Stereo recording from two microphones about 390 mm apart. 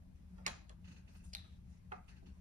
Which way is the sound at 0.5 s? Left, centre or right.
Centre.